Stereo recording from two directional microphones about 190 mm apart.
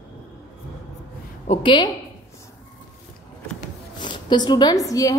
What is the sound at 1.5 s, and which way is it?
Speech, 25° left (ahead or behind).